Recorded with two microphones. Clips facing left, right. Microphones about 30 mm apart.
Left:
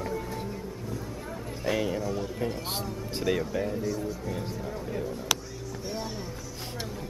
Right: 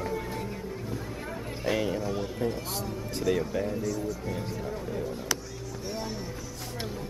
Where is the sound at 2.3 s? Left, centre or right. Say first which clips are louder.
Right 1 dB; centre.